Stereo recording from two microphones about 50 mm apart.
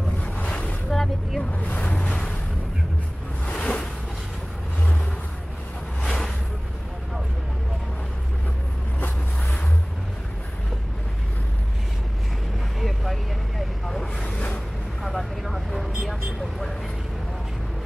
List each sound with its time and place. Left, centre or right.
0.2 s boat: left
0.8 s vehicle: centre
1.5 s vehicle: left
2.0 s waves: centre
3.4 s a sound: left
6.0 s music: centre
12.8 s vehicle: centre